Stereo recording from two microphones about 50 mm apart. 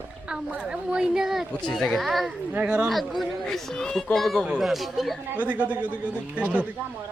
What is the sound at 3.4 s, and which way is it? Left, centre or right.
Speech, centre.